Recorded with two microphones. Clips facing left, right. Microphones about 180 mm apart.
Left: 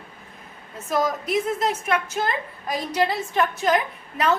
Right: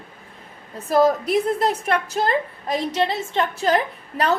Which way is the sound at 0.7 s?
35° right (ahead or behind).